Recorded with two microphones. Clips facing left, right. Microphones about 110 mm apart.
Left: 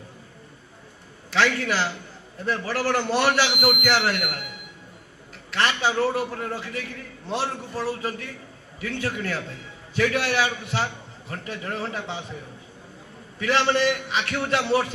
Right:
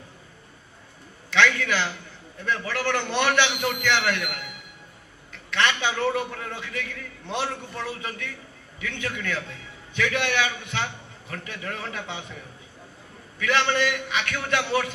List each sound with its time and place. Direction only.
1.3 s a man's voice: 35° left (ahead or behind)
13.4 s a man's voice: 35° left (ahead or behind)